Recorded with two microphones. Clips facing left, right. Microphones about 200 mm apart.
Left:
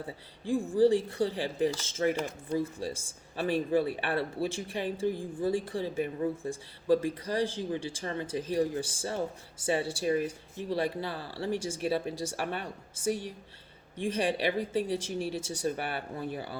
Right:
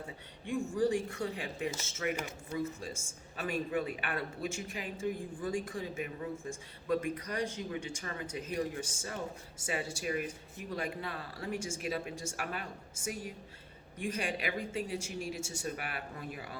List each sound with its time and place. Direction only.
0.4 s speech: 30° left (ahead or behind)
14.0 s speech: 30° left (ahead or behind)